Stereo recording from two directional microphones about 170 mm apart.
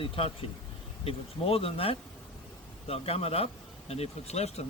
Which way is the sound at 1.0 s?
35° left (ahead or behind).